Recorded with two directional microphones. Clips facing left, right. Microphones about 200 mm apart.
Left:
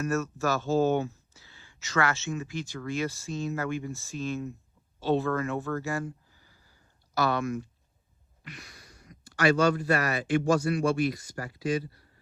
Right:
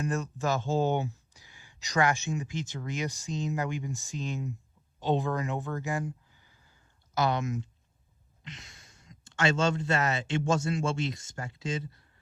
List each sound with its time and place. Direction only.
0.0 s speech: 15° right (ahead or behind)